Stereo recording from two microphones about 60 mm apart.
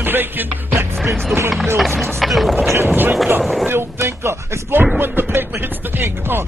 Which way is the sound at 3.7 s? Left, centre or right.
Right.